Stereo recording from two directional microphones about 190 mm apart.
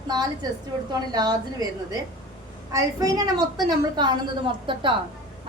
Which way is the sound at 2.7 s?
20° right (ahead or behind).